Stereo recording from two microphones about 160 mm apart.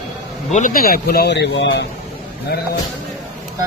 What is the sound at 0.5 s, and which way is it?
Speech, 55° left (ahead or behind).